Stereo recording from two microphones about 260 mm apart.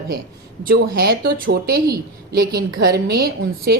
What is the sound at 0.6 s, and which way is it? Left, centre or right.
A woman's voice, right.